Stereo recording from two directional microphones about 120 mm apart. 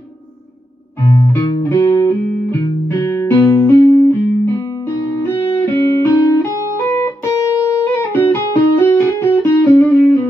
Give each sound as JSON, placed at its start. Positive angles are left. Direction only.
{"t": 1.7, "sound": "music", "side_deg": 20}
{"t": 5.2, "sound": "music", "side_deg": 20}
{"t": 8.2, "sound": "music", "side_deg": 15}